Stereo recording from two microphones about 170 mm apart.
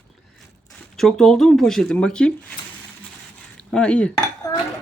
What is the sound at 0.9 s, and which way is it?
Speech, 5° left (ahead or behind).